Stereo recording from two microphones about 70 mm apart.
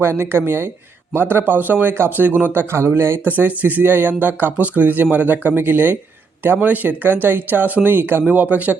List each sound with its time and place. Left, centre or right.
0.0 s speech: right
3.2 s speech: right